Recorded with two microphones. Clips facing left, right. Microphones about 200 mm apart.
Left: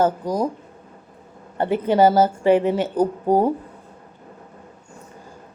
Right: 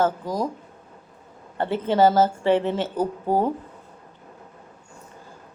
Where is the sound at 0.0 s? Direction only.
15° left (ahead or behind).